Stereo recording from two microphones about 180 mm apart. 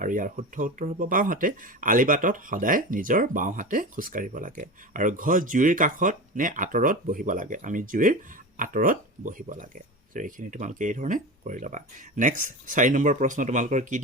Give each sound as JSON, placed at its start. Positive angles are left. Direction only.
{"t": 0.0, "sound": "speech", "side_deg": -50}